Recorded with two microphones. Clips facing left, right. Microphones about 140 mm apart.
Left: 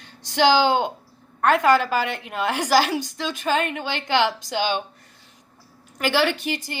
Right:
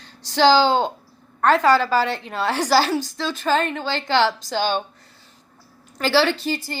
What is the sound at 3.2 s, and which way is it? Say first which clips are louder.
Speech: right 2 dB; 15° left (ahead or behind).